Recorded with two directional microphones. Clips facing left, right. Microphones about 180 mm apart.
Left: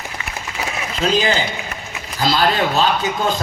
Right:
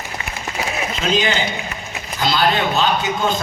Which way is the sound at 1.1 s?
35° left (ahead or behind).